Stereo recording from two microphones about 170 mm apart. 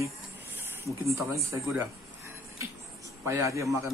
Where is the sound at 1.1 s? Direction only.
15° right (ahead or behind).